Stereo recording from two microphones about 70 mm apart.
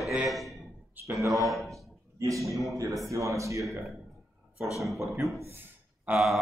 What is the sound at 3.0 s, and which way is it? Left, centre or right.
Speech, right.